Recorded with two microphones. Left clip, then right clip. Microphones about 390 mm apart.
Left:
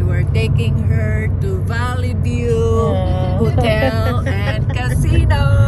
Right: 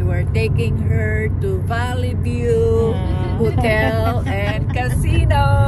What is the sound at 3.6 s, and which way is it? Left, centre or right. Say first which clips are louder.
Speech: left 2 dB; centre.